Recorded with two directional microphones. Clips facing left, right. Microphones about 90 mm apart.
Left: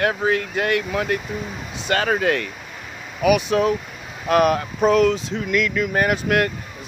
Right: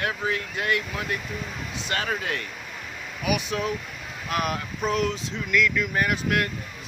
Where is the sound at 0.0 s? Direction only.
50° left (ahead or behind); by 5.2 s 70° left (ahead or behind).